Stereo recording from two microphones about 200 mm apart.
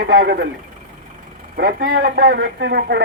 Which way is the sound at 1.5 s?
50° right (ahead or behind).